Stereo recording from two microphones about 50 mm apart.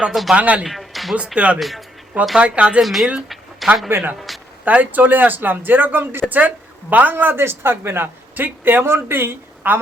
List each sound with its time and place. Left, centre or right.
0.1 s speech: centre
0.3 s speech: right
0.7 s music: centre
1.5 s speech: centre
2.4 s speech: right
2.8 s speech: centre
3.8 s speech: right
4.6 s speech: right
6.2 s speech: right
7.3 s speech: right
8.8 s speech: right